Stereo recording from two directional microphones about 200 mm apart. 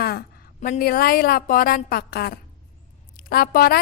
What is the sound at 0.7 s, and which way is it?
A woman's voice, 50° left (ahead or behind).